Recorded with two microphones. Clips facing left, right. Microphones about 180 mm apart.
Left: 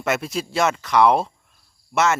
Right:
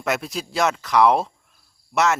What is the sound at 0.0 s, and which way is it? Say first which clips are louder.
Speech: left 2 dB; centre (ahead or behind).